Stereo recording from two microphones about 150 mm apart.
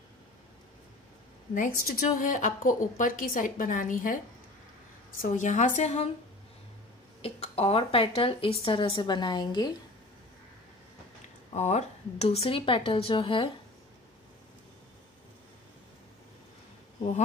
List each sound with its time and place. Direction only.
1.9 s a woman's voice: 70° left (ahead or behind)
5.2 s a woman's voice: 55° left (ahead or behind)
7.2 s speech: 40° left (ahead or behind)
11.5 s speech: 50° left (ahead or behind)